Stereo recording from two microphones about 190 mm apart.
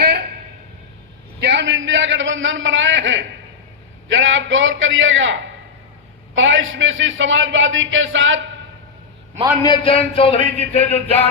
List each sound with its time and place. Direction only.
0.0 s a sound: 55° right (ahead or behind)
1.4 s a man's voice: 65° right (ahead or behind); by 8.4 s 90° right
9.6 s speech: 25° left (ahead or behind)